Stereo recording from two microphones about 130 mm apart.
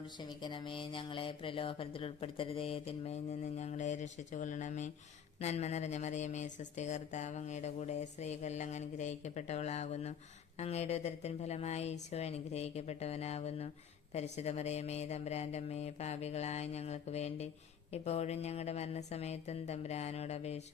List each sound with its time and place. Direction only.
0.2 s speech: 35° left (ahead or behind); by 4.9 s 70° left (ahead or behind)
5.4 s speech: 55° left (ahead or behind)